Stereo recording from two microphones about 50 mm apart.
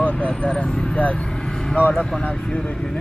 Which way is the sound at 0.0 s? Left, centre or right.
Left.